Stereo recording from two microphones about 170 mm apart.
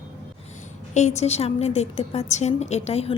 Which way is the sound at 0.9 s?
40° left (ahead or behind).